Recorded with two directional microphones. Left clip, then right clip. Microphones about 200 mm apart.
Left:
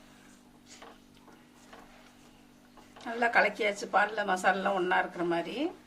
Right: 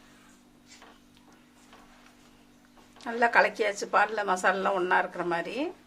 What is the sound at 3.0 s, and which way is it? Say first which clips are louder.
A woman's voice: right 3 dB; 45° right (ahead or behind).